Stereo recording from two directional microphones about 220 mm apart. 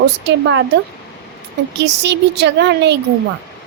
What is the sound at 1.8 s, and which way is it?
Speech, 50° right (ahead or behind).